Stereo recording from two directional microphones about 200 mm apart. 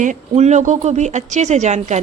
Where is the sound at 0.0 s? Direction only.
35° right (ahead or behind).